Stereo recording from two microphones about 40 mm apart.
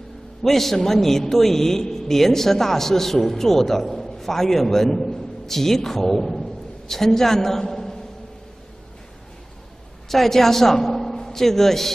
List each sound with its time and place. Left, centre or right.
0.4 s a man's voice: centre
10.0 s a man's voice: centre